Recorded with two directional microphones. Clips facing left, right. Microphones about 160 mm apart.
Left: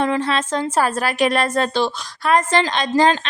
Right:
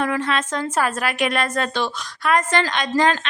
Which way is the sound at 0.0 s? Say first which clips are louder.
Left 3 dB; 30° left (ahead or behind).